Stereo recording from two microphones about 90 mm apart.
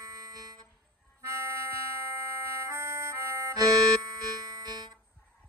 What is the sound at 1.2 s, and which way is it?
Music, 30° right (ahead or behind).